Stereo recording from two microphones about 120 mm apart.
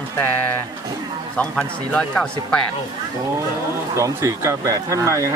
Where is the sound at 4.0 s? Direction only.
25° right (ahead or behind).